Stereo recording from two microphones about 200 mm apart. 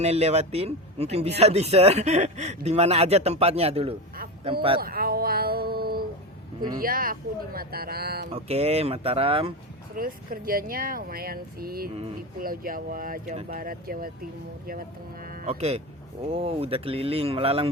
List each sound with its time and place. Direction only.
0.0 s speech: 30° right (ahead or behind)
4.8 s a sound: 50° right (ahead or behind)
6.7 s speech: 45° right (ahead or behind)
8.3 s speech: 30° right (ahead or behind)
9.9 s speech: 45° right (ahead or behind)
15.4 s speech: 30° right (ahead or behind)